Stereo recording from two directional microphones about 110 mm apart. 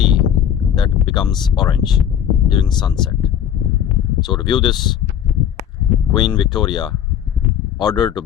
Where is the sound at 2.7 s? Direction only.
40° left (ahead or behind).